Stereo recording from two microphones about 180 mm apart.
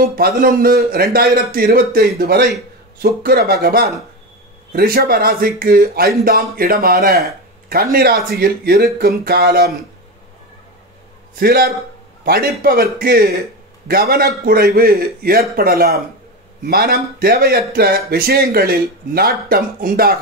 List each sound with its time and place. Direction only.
0.1 s speech: 50° right (ahead or behind)
11.3 s speech: 55° right (ahead or behind)